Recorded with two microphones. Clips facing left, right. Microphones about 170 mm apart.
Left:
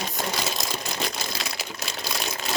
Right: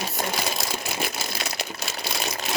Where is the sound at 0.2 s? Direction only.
Centre (ahead or behind).